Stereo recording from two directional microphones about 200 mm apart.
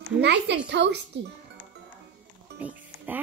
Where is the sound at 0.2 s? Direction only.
60° right (ahead or behind).